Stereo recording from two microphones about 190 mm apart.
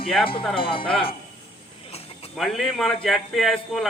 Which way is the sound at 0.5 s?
30° left (ahead or behind).